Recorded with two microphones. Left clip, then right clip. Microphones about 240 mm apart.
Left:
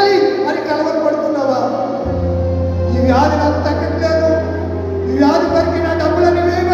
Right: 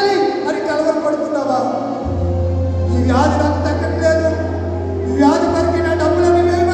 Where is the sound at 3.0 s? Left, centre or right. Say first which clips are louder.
Left 3 dB; right.